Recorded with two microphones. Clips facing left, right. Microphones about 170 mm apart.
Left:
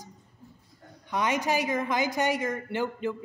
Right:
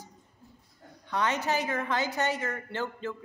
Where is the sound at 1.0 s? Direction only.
15° left (ahead or behind).